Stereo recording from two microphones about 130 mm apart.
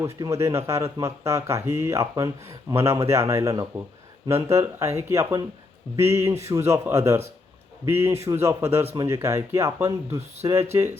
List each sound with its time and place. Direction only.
0.0 s speech: 20° right (ahead or behind)